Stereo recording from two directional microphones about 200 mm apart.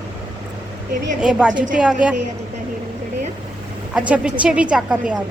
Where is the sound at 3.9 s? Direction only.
5° right (ahead or behind).